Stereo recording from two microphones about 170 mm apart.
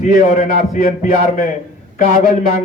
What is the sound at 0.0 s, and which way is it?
A man's voice, 45° left (ahead or behind).